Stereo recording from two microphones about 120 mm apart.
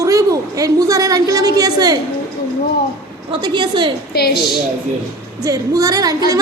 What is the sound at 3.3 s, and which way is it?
Speech, 40° right (ahead or behind).